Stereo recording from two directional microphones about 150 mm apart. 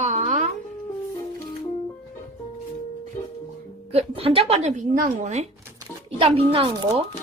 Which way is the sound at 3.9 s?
40° right (ahead or behind).